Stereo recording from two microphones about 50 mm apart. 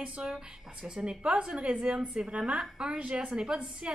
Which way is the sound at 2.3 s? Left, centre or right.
Right.